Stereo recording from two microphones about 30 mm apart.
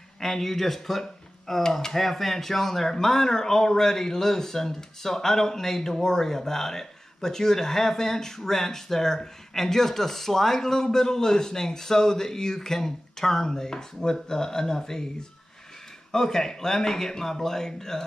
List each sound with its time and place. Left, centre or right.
0.2 s speech: centre
1.6 s a man's voice: centre
2.0 s a man's voice: centre